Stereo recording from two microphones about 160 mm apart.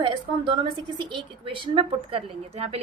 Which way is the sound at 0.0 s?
30° right (ahead or behind).